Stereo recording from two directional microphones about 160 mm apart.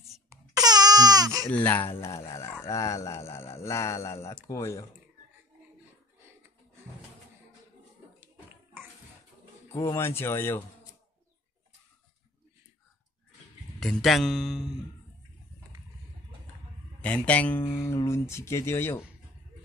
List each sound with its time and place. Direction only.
0.3 s a sound: 25° right (ahead or behind)
1.4 s speech: 10° left (ahead or behind)
9.7 s speech: 20° left (ahead or behind)
13.7 s speech: 5° left (ahead or behind)
17.0 s speech: 10° left (ahead or behind)